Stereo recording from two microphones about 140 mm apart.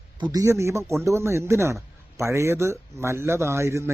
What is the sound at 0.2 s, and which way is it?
Speech, 25° right (ahead or behind).